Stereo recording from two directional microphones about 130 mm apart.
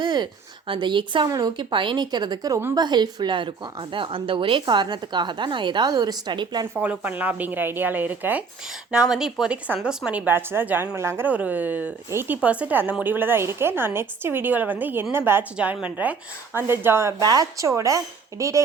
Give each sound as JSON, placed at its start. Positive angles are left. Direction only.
{"t": 0.0, "sound": "a sound", "side_deg": -35}
{"t": 0.7, "sound": "a woman's voice", "side_deg": -40}
{"t": 6.7, "sound": "a woman's voice", "side_deg": -15}